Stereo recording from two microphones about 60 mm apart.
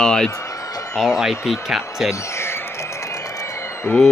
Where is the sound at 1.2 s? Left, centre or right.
Centre.